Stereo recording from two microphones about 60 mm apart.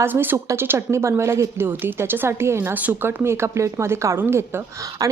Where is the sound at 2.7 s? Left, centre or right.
Right.